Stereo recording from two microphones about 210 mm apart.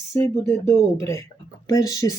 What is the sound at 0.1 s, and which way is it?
Speech, 15° left (ahead or behind).